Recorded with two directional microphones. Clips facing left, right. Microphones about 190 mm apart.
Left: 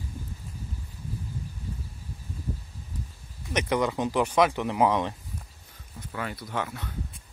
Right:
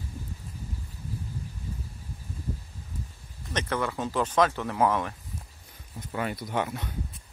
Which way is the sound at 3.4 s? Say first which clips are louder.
Left 4 dB; 15° left (ahead or behind).